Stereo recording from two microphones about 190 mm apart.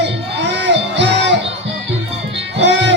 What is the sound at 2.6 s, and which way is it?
Music, 65° right (ahead or behind).